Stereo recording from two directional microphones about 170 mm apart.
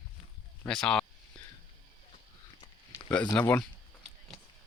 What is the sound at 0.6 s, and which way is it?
Speech, 5° left (ahead or behind).